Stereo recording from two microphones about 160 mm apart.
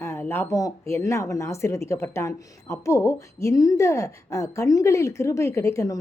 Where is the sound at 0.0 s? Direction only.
15° left (ahead or behind).